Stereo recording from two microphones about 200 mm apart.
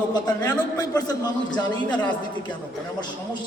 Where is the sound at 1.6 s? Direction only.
5° left (ahead or behind).